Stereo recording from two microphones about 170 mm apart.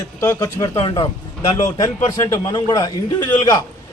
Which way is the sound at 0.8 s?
25° left (ahead or behind).